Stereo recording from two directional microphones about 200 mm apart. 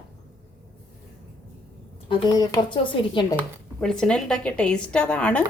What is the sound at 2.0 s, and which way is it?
Speech, 20° left (ahead or behind).